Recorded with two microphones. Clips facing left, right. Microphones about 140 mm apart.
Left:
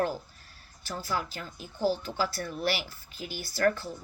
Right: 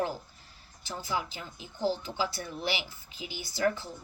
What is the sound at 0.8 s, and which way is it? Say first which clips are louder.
A woman's voice: left 1 dB; 20° right (ahead or behind).